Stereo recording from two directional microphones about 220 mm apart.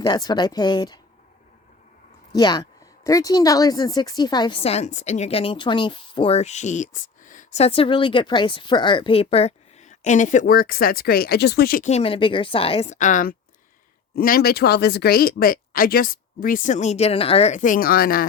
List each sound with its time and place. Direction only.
0.0 s a woman's voice: 20° left (ahead or behind)
2.3 s a woman's voice: 20° left (ahead or behind); by 18.3 s 40° left (ahead or behind)